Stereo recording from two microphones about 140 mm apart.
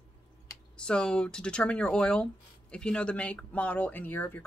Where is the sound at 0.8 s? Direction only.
5° left (ahead or behind).